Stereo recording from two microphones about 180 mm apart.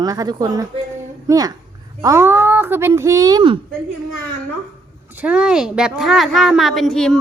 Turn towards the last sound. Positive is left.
turn(degrees=5)  # may be behind; listen again after turning